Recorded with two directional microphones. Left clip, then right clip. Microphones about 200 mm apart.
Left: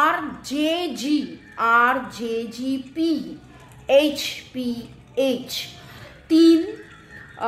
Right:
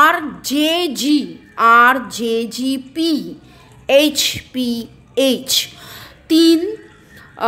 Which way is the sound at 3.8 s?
45° right (ahead or behind).